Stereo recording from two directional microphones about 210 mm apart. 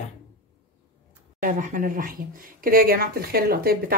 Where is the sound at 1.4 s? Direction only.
40° right (ahead or behind).